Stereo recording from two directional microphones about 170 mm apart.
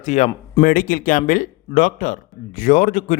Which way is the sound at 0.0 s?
45° left (ahead or behind).